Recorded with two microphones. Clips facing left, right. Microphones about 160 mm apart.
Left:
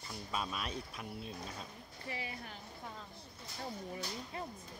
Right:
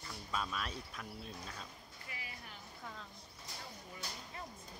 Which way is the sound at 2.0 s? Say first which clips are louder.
Left 9 dB; 30° left (ahead or behind).